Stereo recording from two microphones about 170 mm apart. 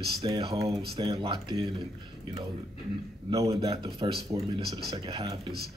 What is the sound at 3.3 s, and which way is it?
Speech, 20° right (ahead or behind).